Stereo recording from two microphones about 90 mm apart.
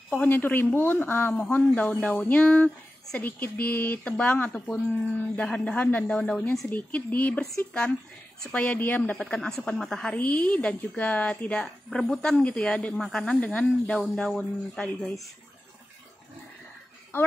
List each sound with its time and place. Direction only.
0.1 s speech: 20° left (ahead or behind)
9.2 s speech: 5° left (ahead or behind)
10.1 s speech: 15° left (ahead or behind)
11.6 s speech: 5° left (ahead or behind)